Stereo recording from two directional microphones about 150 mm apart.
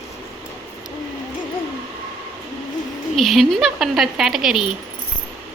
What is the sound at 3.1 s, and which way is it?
Speech, centre (ahead or behind).